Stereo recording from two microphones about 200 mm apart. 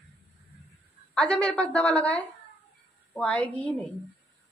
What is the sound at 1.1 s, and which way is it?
A woman's voice, 5° left (ahead or behind).